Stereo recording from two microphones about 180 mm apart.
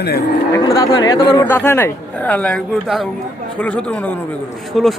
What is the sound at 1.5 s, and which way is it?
A man's voice, 10° left (ahead or behind).